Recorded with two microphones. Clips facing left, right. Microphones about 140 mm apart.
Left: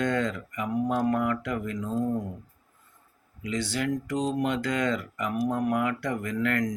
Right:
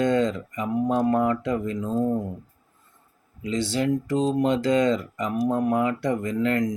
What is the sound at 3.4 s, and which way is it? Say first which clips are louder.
Speech: right 5 dB; 25° right (ahead or behind).